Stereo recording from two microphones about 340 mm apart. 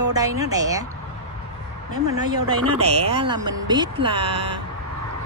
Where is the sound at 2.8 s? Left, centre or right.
Centre.